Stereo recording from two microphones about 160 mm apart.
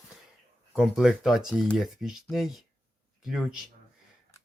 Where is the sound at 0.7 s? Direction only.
Centre (ahead or behind).